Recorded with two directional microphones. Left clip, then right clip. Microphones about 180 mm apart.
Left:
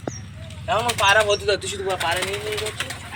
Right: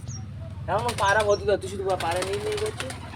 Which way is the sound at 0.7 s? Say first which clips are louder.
Left 5 dB; 60° right (ahead or behind).